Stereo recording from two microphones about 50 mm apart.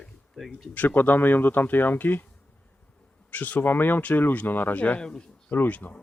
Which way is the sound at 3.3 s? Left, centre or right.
Left.